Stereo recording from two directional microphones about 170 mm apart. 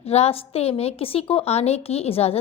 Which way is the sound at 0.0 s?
35° left (ahead or behind).